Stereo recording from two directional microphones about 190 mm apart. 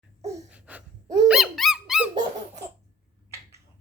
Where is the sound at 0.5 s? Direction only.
5° right (ahead or behind).